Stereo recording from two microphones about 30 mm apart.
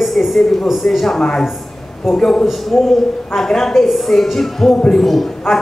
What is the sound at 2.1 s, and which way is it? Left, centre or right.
Speech, left.